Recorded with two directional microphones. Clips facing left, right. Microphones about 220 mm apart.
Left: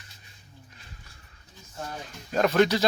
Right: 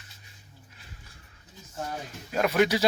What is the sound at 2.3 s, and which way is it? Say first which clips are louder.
Speech: left 2 dB; 10° right (ahead or behind).